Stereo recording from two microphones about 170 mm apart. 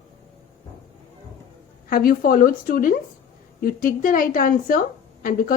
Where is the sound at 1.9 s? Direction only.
55° left (ahead or behind).